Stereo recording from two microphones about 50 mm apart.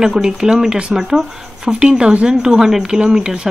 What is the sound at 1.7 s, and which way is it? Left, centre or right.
A woman's voice, centre.